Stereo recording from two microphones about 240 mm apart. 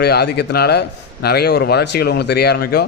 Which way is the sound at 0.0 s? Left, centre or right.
Left.